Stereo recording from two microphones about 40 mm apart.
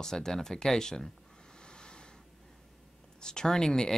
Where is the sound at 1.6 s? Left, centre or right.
Left.